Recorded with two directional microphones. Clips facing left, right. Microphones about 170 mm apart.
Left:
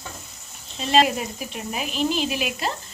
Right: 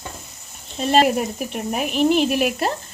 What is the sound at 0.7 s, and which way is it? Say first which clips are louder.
Speech: right 3 dB; 50° right (ahead or behind).